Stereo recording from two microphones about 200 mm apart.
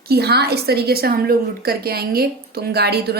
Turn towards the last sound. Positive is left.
turn(degrees=-55)  # may be behind; listen again after turning